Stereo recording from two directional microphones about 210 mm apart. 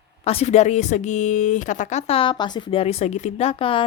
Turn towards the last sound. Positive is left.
turn(degrees=25)  # may be behind; listen again after turning